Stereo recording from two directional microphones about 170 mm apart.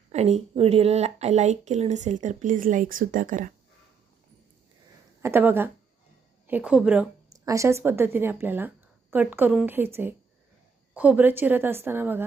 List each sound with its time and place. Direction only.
0.1 s speech: 40° right (ahead or behind)
5.2 s a woman's voice: 15° right (ahead or behind)
7.3 s a woman's voice: 20° right (ahead or behind)